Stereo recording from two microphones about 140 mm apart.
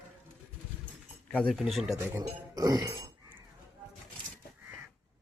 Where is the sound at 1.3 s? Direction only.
10° left (ahead or behind).